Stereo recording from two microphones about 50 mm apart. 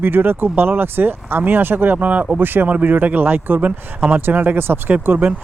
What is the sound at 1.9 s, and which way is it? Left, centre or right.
Speech, right.